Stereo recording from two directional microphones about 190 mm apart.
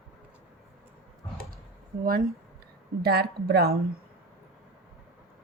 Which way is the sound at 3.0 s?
55° right (ahead or behind).